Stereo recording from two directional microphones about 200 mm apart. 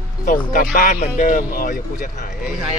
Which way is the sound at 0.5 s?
45° left (ahead or behind).